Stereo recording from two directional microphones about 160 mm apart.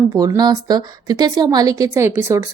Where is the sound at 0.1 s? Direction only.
25° right (ahead or behind).